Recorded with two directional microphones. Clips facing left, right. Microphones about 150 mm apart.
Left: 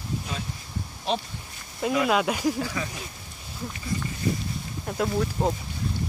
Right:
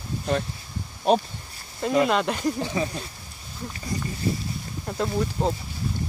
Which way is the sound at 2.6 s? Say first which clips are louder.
Right 4 dB; 30° right (ahead or behind).